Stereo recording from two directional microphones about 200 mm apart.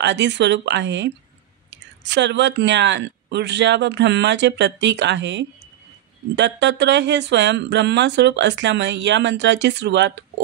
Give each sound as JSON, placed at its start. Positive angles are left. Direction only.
{"t": 0.0, "sound": "speech", "side_deg": -60}